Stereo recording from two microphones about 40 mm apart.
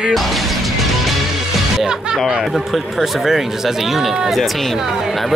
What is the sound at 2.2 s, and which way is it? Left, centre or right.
Speech, centre.